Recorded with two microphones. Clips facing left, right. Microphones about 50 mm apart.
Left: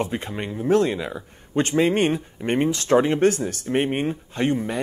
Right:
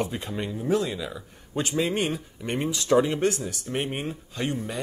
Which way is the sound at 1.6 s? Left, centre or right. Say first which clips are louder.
Left 6 dB; left.